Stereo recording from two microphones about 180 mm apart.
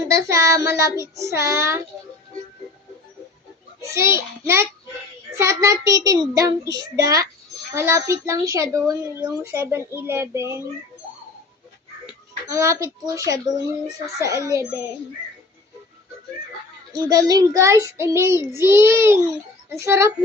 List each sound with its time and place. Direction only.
0.1 s child singing: 15° right (ahead or behind)
3.8 s child singing: 15° right (ahead or behind)
5.3 s a child's voice: 15° right (ahead or behind)
7.7 s child singing: 15° right (ahead or behind)
12.5 s a child's voice: 15° right (ahead or behind)
14.2 s child singing: 20° right (ahead or behind)
17.1 s child singing: 20° right (ahead or behind)